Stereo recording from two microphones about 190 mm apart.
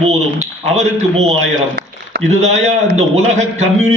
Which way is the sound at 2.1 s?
65° right (ahead or behind).